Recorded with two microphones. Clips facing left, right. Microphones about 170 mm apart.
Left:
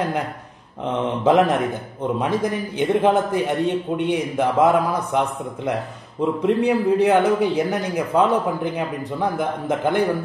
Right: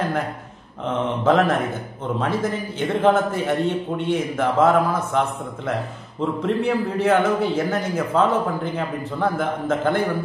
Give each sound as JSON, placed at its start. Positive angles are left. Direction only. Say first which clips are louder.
{"t": 0.8, "sound": "a man's voice", "louder": "left 1 dB", "side_deg": 15}
{"t": 6.4, "sound": "a man's voice", "louder": "left 4 dB", "side_deg": 15}